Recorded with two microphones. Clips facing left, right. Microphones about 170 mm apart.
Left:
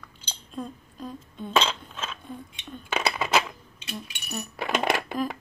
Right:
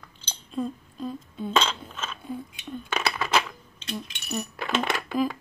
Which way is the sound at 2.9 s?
20° left (ahead or behind).